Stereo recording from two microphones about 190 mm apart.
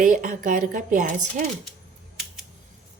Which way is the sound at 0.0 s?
45° right (ahead or behind).